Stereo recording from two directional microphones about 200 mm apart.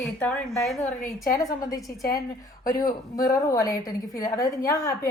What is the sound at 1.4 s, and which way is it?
Speech, 15° left (ahead or behind).